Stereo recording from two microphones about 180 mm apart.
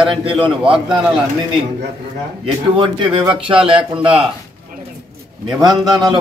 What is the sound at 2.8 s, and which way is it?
A man's voice, 25° right (ahead or behind).